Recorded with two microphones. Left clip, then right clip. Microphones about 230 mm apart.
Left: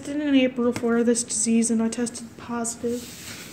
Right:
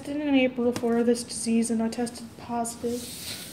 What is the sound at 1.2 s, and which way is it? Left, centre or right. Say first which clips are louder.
A woman's voice: left 4 dB; left.